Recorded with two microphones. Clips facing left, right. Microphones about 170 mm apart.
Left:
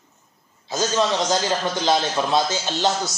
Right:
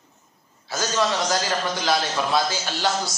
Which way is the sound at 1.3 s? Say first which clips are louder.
Left 2 dB; 25° left (ahead or behind).